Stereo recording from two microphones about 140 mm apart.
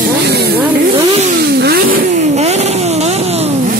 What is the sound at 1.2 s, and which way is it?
Vehicle, 90° right.